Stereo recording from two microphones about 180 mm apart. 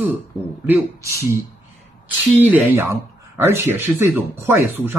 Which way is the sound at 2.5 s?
10° right (ahead or behind).